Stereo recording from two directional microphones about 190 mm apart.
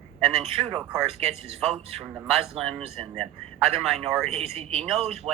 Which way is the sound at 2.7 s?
30° right (ahead or behind).